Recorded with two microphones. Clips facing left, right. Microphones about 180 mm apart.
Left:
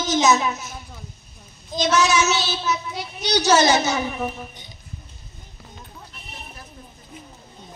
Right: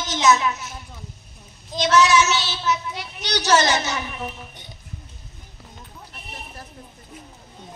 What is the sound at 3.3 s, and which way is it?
Speech, 10° left (ahead or behind).